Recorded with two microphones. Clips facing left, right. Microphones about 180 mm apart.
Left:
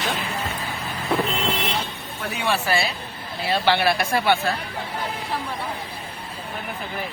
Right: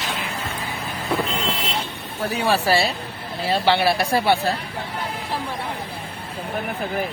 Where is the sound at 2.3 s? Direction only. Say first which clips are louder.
Right 4 dB; 35° right (ahead or behind).